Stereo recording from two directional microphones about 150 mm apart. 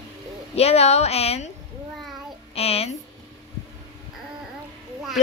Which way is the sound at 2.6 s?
40° left (ahead or behind).